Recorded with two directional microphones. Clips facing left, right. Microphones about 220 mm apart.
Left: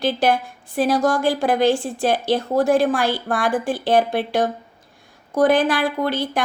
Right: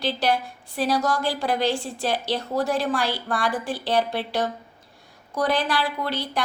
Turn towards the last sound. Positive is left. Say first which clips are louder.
# left 6 dB
turn(degrees=50)  # may be behind; listen again after turning